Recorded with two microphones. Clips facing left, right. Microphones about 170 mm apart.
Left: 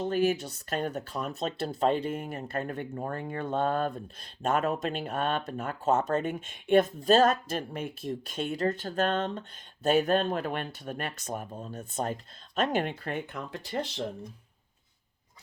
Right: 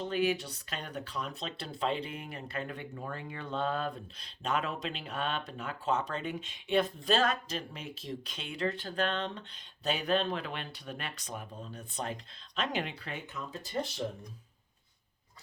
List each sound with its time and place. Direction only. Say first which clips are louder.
0.0 s speech: left 4 dB; 45° left (ahead or behind); by 13.7 s 65° left (ahead or behind)